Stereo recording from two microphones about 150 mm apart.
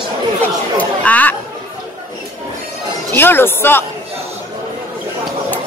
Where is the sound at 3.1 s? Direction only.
15° left (ahead or behind).